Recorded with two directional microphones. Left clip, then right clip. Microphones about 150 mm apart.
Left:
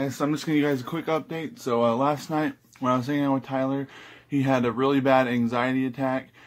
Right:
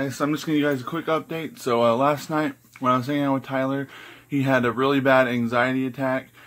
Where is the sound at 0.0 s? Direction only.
10° left (ahead or behind).